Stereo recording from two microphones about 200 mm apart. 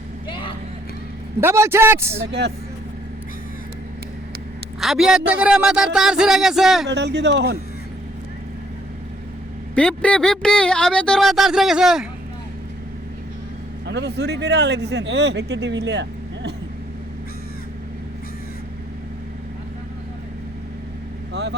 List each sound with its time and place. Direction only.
0.3 s vehicle: 25° left (ahead or behind)
1.4 s a man's voice: 15° right (ahead or behind)
2.2 s speech: 60° right (ahead or behind)
4.8 s speech: centre (ahead or behind)
6.8 s speech: 60° right (ahead or behind)
9.7 s speech: 5° left (ahead or behind)
13.8 s speech: 60° right (ahead or behind)